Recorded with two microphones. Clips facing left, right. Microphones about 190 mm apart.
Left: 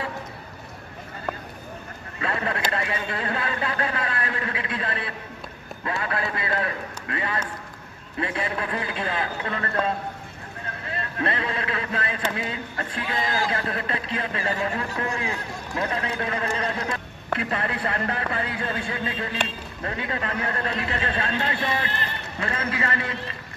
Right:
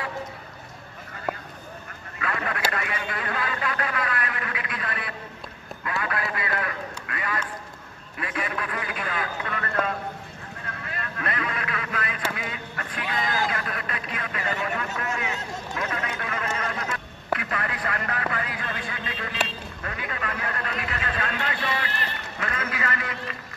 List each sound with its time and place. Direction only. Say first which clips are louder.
2.1 s vehicle: left 2 dB; 30° left (ahead or behind)
2.7 s a man's voice: left 3 dB; 30° left (ahead or behind)